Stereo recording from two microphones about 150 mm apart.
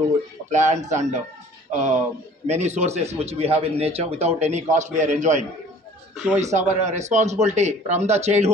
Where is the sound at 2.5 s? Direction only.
50° right (ahead or behind).